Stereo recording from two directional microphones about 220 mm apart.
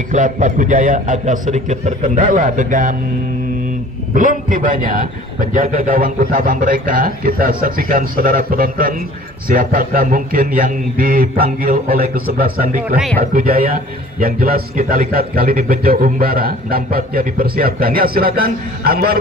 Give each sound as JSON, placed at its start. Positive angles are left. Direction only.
{"t": 0.1, "sound": "a man's voice", "side_deg": -35}
{"t": 4.1, "sound": "a man's voice", "side_deg": -40}
{"t": 12.9, "sound": "speech", "side_deg": 0}
{"t": 13.3, "sound": "a man's voice", "side_deg": -40}